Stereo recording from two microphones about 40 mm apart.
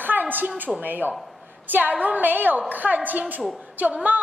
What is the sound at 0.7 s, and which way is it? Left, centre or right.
A woman's voice, right.